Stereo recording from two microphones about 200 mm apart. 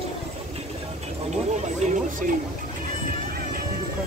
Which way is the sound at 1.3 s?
35° right (ahead or behind).